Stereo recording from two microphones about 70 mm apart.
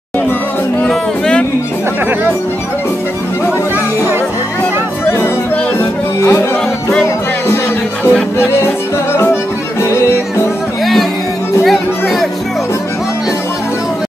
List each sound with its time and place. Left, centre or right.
0.8 s music: centre
5.8 s music: left
7.4 s music: left
11.6 s music: centre